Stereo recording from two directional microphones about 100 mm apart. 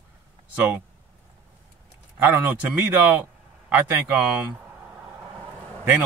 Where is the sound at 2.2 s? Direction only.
20° right (ahead or behind).